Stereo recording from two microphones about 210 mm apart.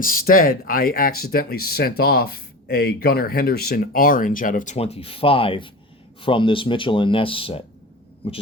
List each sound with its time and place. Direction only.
0.0 s speech: 40° left (ahead or behind)